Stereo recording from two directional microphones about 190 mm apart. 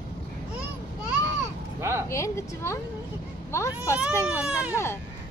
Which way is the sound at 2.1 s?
15° left (ahead or behind).